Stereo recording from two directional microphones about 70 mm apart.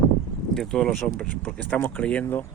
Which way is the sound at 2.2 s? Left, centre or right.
Left.